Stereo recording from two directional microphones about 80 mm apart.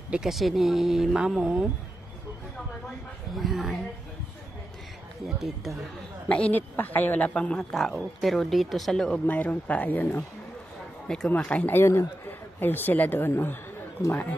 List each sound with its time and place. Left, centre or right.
0.1 s speech: centre
3.3 s speech: centre
5.4 s speech: centre
6.2 s a woman's voice: centre
9.2 s speech: left
11.1 s a woman's voice: centre
11.7 s speech: left